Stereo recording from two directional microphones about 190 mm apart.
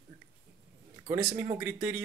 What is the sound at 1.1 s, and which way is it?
Speech, 20° right (ahead or behind).